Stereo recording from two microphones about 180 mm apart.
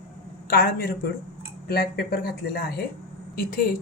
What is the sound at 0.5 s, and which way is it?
A woman's voice, 55° left (ahead or behind).